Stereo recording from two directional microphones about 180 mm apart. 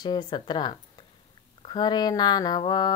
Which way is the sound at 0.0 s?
25° left (ahead or behind).